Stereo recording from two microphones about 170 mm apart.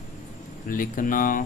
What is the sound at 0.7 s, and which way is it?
Speech, 55° left (ahead or behind).